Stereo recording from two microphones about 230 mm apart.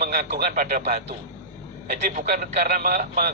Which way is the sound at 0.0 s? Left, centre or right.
Right.